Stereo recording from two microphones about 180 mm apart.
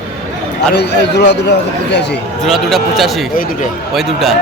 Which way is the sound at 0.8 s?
70° left (ahead or behind).